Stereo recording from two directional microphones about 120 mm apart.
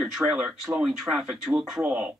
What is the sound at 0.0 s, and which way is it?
Speech, 5° right (ahead or behind).